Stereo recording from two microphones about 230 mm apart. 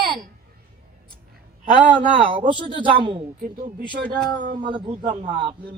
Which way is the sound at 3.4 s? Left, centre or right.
Right.